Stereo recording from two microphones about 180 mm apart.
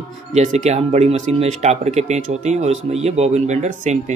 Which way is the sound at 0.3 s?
40° right (ahead or behind).